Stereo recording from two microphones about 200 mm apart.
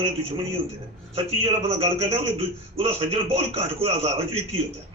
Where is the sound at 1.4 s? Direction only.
30° right (ahead or behind).